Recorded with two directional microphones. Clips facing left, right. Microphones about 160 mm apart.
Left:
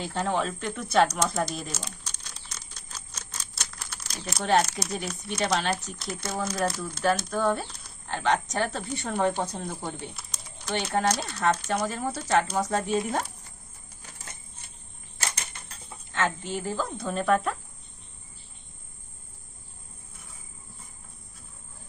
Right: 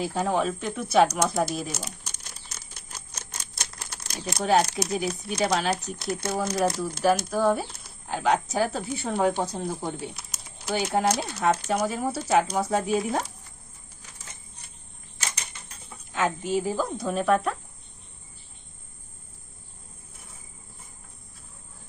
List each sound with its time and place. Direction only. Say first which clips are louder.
0.0 s speech: right 3 dB; 5° right (ahead or behind)
1.7 s crumpling: right 2 dB; 10° right (ahead or behind)
4.7 s speech: right 5 dB; 5° right (ahead or behind)
16.1 s speech: right 4 dB; 10° right (ahead or behind)